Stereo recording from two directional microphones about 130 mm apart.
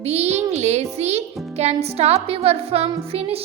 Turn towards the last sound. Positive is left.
turn(degrees=-50)  # may be behind; listen again after turning